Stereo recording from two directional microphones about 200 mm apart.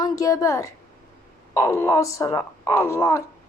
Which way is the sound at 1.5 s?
15° left (ahead or behind).